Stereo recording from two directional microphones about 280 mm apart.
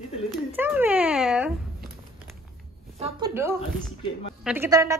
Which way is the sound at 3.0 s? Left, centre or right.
Centre.